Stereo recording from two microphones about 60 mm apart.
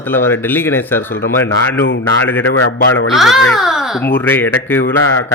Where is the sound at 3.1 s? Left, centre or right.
Centre.